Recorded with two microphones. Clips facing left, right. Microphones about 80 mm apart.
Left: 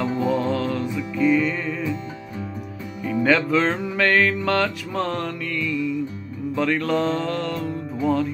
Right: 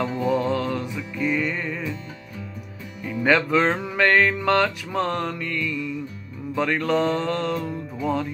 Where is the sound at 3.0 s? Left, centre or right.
Centre.